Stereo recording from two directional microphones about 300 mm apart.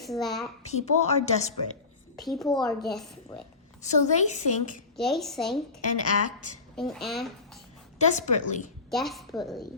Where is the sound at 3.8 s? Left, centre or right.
Left.